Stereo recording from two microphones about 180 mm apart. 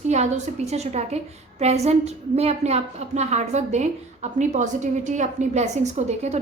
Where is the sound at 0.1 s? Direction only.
40° right (ahead or behind).